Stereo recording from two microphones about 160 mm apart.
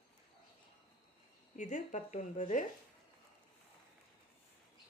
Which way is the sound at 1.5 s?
50° left (ahead or behind).